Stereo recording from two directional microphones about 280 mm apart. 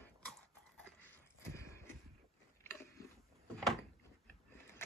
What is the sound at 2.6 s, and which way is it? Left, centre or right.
Biting, centre.